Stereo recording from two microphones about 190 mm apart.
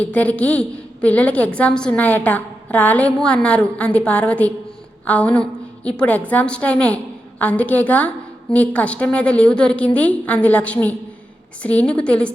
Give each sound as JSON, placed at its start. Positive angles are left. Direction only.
{"t": 0.0, "sound": "a woman's voice", "side_deg": 10}